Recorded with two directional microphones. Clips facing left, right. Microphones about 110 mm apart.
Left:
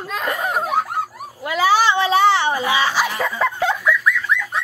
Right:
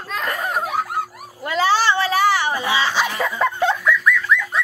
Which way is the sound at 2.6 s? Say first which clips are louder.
Left 1 dB; 15° left (ahead or behind).